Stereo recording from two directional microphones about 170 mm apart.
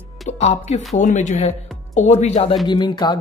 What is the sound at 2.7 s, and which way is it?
Speech, 25° left (ahead or behind).